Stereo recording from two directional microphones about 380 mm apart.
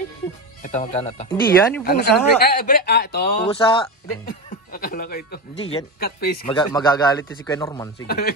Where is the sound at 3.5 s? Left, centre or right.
Centre.